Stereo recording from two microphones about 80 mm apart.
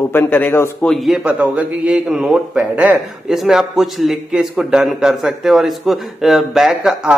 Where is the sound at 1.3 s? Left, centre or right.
Centre.